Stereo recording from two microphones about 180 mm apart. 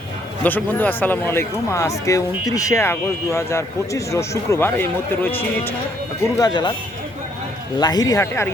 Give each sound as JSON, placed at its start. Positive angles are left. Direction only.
{"t": 0.4, "sound": "speech", "side_deg": 10}
{"t": 7.8, "sound": "speech", "side_deg": 20}